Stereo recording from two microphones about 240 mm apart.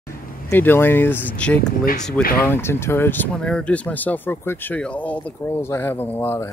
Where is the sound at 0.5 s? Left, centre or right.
Centre.